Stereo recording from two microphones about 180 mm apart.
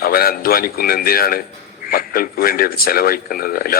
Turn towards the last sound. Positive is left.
turn(degrees=55)  # may be behind; listen again after turning